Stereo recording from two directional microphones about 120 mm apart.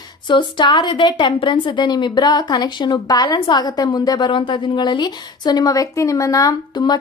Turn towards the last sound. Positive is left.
turn(degrees=35)  # may be behind; listen again after turning